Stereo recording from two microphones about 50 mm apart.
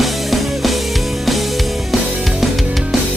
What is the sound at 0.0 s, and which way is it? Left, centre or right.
Music, centre.